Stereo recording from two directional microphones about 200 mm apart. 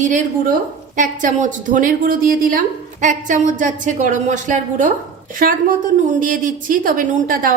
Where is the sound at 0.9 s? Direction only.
40° right (ahead or behind).